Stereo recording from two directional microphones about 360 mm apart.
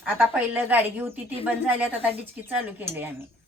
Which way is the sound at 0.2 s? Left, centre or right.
Centre.